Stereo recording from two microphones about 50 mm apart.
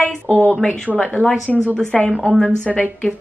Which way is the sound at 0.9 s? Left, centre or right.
Centre.